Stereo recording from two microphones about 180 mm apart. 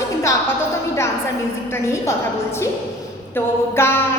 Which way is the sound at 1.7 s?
15° left (ahead or behind).